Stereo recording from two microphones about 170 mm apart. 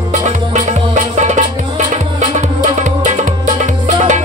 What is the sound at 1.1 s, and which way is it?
Music, 45° right (ahead or behind).